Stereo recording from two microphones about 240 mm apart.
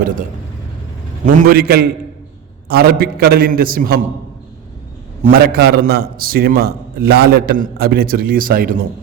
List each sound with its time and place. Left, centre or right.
1.2 s a man's voice: right
5.2 s a man's voice: right